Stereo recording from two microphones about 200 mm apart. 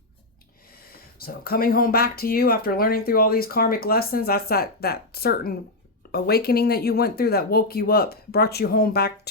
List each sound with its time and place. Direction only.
0.7 s speech: 50° left (ahead or behind)